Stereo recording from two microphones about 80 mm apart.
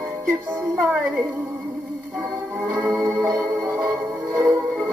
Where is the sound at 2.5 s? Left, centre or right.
Right.